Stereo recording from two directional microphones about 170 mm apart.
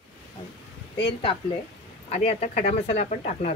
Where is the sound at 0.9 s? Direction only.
30° left (ahead or behind).